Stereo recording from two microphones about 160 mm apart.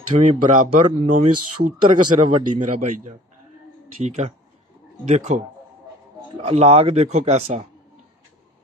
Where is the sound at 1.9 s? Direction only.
35° right (ahead or behind).